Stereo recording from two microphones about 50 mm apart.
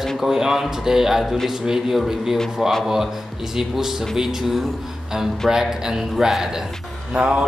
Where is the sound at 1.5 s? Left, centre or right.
Centre.